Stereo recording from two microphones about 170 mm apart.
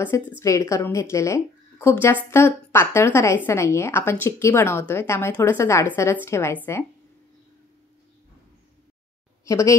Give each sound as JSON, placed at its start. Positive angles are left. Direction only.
{"t": 0.4, "sound": "a woman's voice", "side_deg": 20}
{"t": 9.4, "sound": "speech", "side_deg": 20}